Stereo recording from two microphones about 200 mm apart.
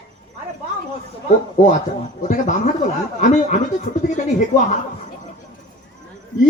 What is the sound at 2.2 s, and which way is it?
Speech, 40° left (ahead or behind).